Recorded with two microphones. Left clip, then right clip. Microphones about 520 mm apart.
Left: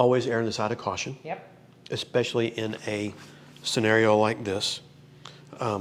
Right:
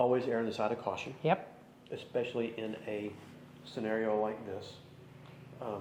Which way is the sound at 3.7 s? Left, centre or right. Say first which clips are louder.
Left 12 dB; left.